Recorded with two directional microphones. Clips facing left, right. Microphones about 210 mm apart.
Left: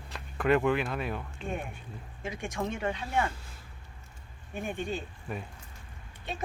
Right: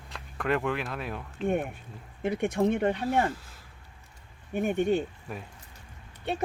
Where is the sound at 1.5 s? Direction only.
55° right (ahead or behind).